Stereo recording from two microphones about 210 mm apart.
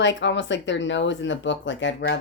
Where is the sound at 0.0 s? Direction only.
60° left (ahead or behind).